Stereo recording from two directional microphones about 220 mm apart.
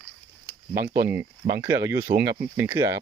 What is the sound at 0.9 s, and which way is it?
Speech, 10° right (ahead or behind).